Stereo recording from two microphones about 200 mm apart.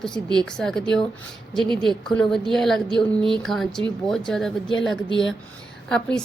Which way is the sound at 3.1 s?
25° right (ahead or behind).